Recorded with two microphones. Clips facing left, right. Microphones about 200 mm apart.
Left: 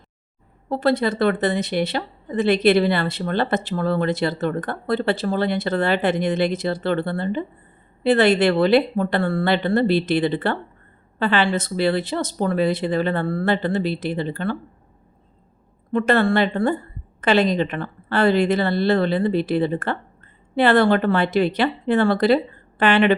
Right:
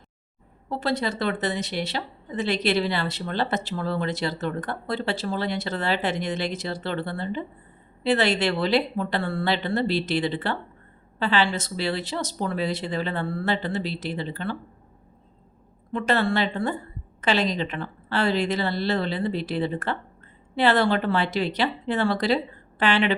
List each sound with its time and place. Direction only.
0.7 s a woman's voice: 55° left (ahead or behind)
15.9 s a woman's voice: 55° left (ahead or behind)